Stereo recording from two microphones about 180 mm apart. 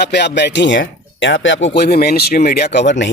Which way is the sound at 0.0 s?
70° left (ahead or behind).